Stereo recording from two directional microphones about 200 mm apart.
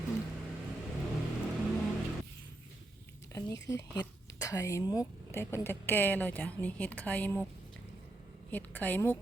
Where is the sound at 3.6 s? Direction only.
15° left (ahead or behind).